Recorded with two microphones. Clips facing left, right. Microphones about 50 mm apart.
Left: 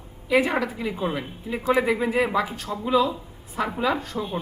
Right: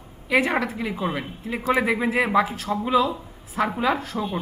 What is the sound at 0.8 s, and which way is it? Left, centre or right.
Speech, centre.